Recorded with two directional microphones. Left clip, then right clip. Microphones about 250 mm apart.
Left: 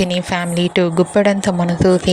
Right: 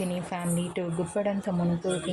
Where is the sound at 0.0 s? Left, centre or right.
Left.